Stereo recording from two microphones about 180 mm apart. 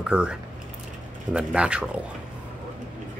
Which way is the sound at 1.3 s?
5° right (ahead or behind).